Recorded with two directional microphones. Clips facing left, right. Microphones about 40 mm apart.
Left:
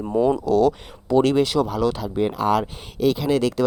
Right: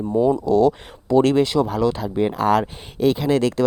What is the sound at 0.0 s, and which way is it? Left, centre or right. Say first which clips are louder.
Speech: right 1 dB; left.